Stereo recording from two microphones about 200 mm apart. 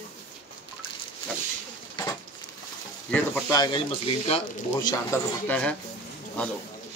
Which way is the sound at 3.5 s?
25° left (ahead or behind).